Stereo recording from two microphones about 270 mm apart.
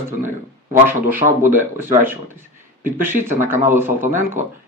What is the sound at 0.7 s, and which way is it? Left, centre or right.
Speech, centre.